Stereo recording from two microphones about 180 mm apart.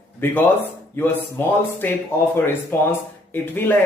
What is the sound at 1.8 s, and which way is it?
Speech, 10° left (ahead or behind).